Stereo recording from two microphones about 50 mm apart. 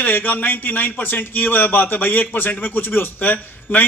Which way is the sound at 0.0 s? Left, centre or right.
Left.